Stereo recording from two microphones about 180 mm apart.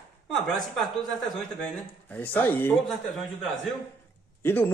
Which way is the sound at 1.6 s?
10° left (ahead or behind).